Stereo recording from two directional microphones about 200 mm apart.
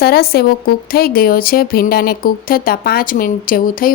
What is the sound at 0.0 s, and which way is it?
A woman's voice, 50° left (ahead or behind).